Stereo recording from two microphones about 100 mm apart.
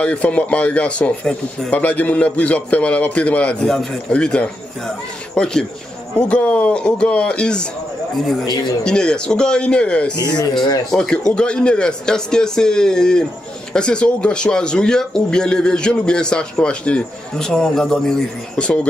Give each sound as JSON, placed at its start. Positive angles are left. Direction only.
{"t": 0.0, "sound": "speech", "side_deg": 10}
{"t": 8.8, "sound": "speech", "side_deg": 10}
{"t": 10.3, "sound": "speech", "side_deg": 45}
{"t": 10.9, "sound": "speech", "side_deg": 5}